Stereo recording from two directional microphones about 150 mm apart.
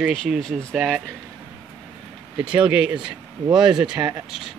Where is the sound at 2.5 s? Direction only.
5° right (ahead or behind).